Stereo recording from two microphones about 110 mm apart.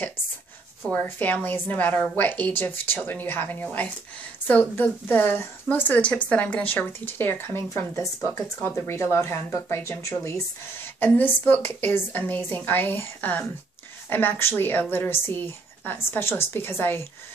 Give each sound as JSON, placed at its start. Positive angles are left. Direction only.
{"t": 0.8, "sound": "a woman's voice", "side_deg": 15}